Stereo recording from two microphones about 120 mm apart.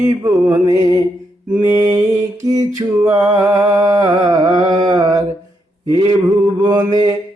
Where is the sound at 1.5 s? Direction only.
15° right (ahead or behind).